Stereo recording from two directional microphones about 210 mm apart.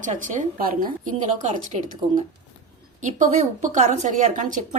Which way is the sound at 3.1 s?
35° right (ahead or behind).